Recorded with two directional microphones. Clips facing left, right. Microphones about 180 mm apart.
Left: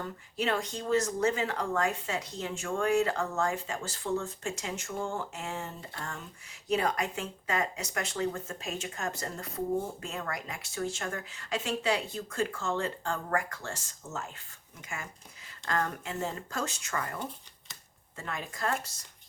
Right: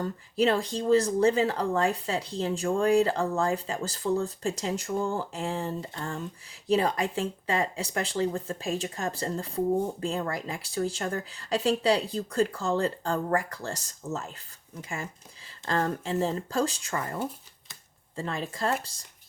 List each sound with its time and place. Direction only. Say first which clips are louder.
0.0 s speech: right 8 dB; 35° right (ahead or behind)
18.2 s speech: right 5 dB; 30° right (ahead or behind)